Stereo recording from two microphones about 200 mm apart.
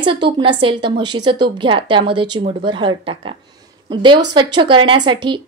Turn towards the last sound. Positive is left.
turn(degrees=-20)  # may be behind; listen again after turning